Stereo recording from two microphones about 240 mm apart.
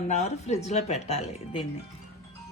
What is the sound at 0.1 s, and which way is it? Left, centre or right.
Speech, left.